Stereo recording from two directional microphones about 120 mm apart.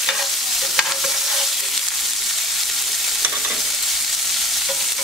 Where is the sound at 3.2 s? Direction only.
5° right (ahead or behind).